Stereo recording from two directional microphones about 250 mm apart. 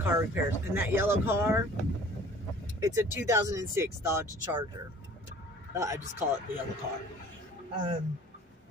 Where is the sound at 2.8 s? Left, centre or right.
Centre.